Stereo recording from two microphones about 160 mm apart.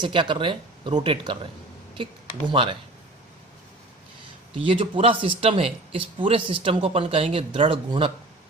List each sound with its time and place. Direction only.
0.0 s speech: 30° right (ahead or behind)
2.5 s speech: 30° right (ahead or behind)
4.5 s speech: 35° right (ahead or behind)